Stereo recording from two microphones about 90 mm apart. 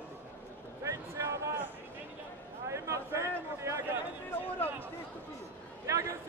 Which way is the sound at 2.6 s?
35° right (ahead or behind).